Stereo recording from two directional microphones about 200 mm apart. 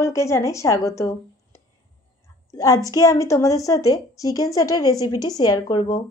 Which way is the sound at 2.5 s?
15° left (ahead or behind).